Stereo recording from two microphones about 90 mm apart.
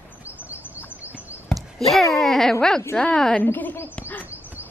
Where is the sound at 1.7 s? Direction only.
Centre (ahead or behind).